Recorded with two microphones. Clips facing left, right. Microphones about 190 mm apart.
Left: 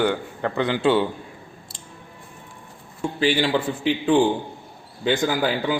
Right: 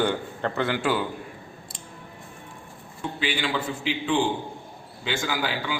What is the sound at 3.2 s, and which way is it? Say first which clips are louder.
A man's voice: left 8 dB; 40° left (ahead or behind).